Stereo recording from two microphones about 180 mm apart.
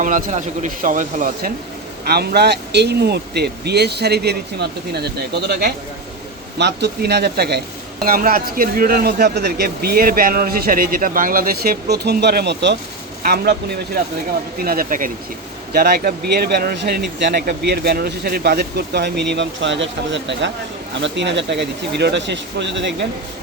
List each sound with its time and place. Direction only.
0.0 s speech: 45° right (ahead or behind)
2.0 s a man's voice: 60° right (ahead or behind)
13.2 s a man's voice: 60° right (ahead or behind)
15.7 s a man's voice: 60° right (ahead or behind)
19.3 s speech: 85° right